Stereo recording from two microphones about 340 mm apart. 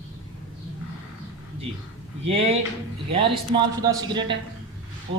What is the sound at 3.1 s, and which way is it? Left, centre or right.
A man's voice, centre.